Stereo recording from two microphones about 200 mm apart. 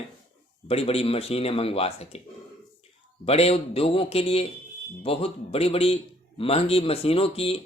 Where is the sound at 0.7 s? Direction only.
30° left (ahead or behind).